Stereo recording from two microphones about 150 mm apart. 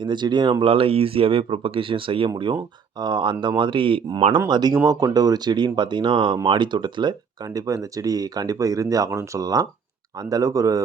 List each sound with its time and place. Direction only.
0.0 s speech: 30° right (ahead or behind)